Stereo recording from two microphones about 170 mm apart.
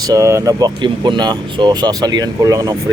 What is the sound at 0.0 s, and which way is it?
Speech, 20° right (ahead or behind).